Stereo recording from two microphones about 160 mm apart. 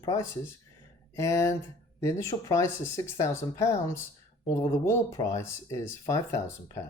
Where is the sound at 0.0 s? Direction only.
20° left (ahead or behind).